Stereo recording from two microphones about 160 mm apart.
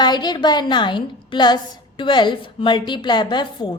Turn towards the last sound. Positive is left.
turn(degrees=30)  # may be behind; listen again after turning